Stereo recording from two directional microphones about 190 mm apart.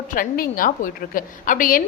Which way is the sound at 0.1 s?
45° left (ahead or behind).